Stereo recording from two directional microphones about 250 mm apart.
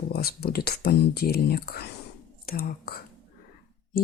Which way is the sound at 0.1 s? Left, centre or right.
Left.